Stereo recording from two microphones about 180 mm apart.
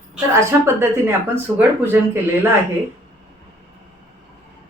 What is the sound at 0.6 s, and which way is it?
Speech, 15° right (ahead or behind).